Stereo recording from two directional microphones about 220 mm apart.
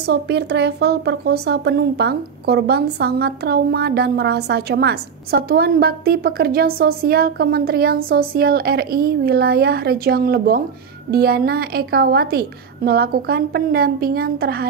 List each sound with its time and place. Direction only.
0.0 s a woman's voice: 50° right (ahead or behind)